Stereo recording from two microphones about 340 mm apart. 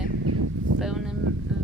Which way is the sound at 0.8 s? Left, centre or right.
Centre.